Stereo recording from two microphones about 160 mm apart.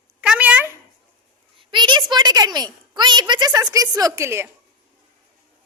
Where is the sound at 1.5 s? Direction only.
30° right (ahead or behind).